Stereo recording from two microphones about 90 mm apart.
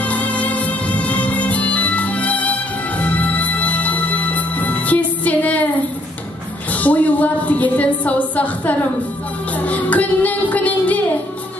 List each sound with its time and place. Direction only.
0.0 s music: 15° left (ahead or behind)
6.7 s speech: 15° left (ahead or behind)
9.6 s music: 15° left (ahead or behind)